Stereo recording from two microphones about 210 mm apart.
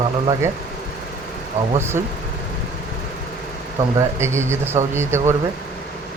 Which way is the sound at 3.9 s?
10° right (ahead or behind).